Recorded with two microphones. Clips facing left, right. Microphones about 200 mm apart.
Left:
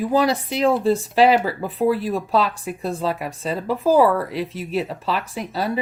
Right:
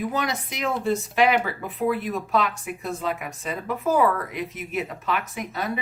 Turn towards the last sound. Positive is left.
turn(degrees=30)  # may be behind; listen again after turning